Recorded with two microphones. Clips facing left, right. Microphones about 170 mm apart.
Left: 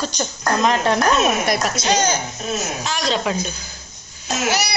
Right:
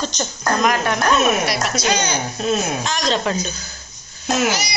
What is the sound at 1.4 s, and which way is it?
Speech, 45° left (ahead or behind).